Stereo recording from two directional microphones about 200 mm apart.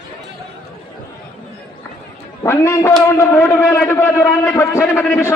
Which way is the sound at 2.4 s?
15° left (ahead or behind).